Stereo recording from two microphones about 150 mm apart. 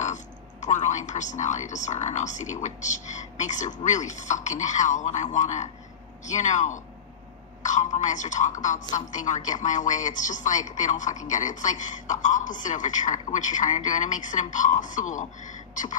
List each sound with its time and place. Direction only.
0.0 s a woman's voice: 55° left (ahead or behind)